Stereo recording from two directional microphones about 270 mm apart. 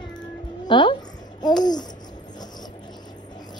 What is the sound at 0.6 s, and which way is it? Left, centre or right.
Music, centre.